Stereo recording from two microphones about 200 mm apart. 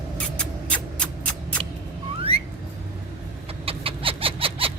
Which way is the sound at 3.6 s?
25° right (ahead or behind).